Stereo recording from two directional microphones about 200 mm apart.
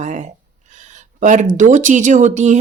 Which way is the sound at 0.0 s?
35° right (ahead or behind).